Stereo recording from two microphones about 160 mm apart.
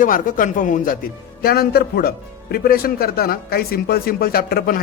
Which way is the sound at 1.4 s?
70° left (ahead or behind).